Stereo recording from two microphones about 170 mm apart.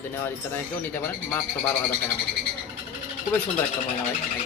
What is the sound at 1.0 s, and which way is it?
Speech, 10° left (ahead or behind).